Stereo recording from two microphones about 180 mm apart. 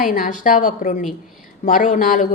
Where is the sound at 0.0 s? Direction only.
50° left (ahead or behind).